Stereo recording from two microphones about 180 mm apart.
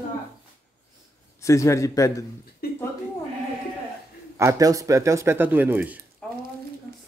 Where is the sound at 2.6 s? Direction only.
55° left (ahead or behind).